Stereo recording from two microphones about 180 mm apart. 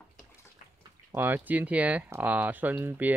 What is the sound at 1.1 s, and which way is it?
Speech, 10° right (ahead or behind).